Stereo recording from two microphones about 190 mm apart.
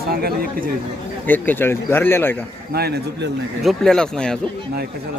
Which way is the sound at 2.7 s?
55° right (ahead or behind).